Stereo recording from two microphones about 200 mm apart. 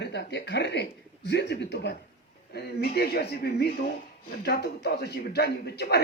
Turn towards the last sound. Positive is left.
turn(degrees=55)  # may be behind; listen again after turning